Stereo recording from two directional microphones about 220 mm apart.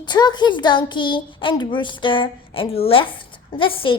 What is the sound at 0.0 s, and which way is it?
A child's voice, 20° left (ahead or behind).